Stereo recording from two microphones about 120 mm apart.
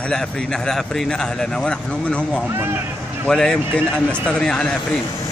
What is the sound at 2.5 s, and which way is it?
Speech, 20° right (ahead or behind).